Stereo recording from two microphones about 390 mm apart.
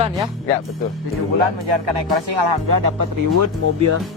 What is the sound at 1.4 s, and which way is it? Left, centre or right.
Speech, right.